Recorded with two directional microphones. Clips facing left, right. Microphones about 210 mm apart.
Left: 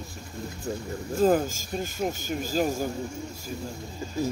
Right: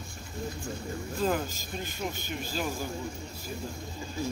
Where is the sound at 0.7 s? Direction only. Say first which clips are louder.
Left 4 dB; 40° left (ahead or behind).